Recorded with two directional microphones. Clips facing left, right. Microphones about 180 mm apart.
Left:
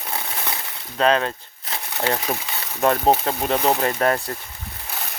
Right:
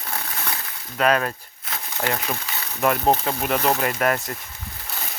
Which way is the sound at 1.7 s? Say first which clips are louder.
Left 2 dB; 25° left (ahead or behind).